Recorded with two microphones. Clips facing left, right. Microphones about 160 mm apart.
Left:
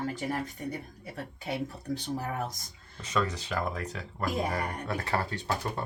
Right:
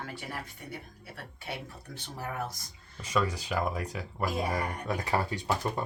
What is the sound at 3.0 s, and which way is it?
Speech, 10° right (ahead or behind).